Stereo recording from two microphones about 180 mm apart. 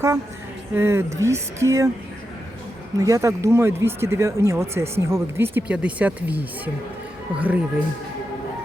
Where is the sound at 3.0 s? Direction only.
20° right (ahead or behind).